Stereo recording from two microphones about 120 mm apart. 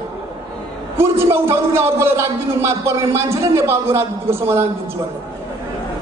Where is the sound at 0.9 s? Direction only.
20° right (ahead or behind).